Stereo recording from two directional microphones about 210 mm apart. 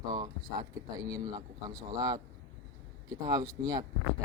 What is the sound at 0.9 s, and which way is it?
Speech, 15° right (ahead or behind).